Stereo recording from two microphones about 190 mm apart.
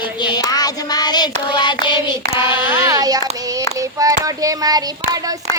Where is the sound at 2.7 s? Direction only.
15° right (ahead or behind).